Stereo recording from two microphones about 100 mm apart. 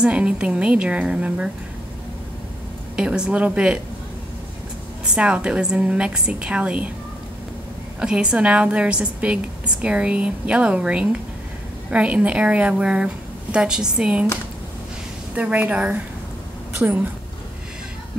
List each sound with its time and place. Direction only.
0.0 s a woman's voice: 10° right (ahead or behind)
3.0 s a woman's voice: 10° right (ahead or behind)
5.0 s a woman's voice: 10° right (ahead or behind)
8.0 s a woman's voice: 10° right (ahead or behind)
15.3 s a woman's voice: 15° right (ahead or behind)